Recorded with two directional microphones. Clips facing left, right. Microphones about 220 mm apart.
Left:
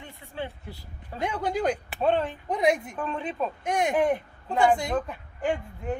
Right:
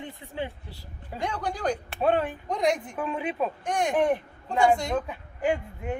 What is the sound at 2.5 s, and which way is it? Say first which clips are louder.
Speech: left 3 dB; 5° left (ahead or behind).